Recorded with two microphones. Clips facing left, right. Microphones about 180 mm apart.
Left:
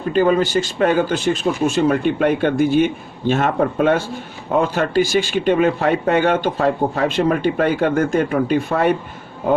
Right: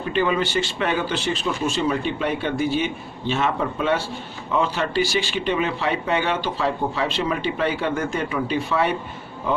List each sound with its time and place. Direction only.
0.1 s speech: 40° left (ahead or behind)